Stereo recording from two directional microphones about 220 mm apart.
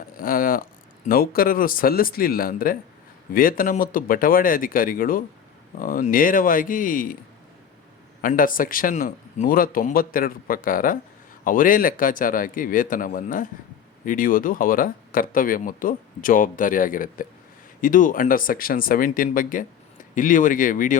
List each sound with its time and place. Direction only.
0.2 s speech: 40° left (ahead or behind)
8.2 s speech: 40° left (ahead or behind)